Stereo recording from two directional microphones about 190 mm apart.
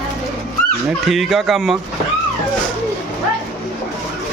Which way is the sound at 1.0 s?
Centre (ahead or behind).